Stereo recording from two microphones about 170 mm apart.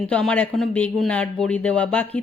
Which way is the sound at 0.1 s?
5° left (ahead or behind).